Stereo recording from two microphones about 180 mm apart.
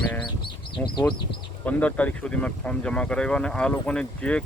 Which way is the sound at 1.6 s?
10° left (ahead or behind).